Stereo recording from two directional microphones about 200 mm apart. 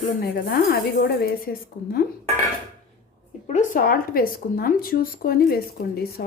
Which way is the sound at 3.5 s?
40° left (ahead or behind).